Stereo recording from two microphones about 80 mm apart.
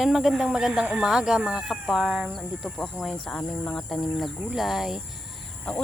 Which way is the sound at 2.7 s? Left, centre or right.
Centre.